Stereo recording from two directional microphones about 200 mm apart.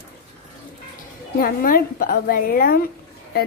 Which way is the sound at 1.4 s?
45° left (ahead or behind).